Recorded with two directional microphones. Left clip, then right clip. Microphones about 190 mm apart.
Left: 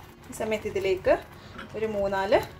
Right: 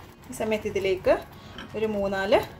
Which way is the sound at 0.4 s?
Centre (ahead or behind).